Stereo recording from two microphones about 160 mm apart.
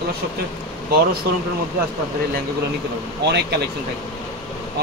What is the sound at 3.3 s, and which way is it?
Speech, 90° right.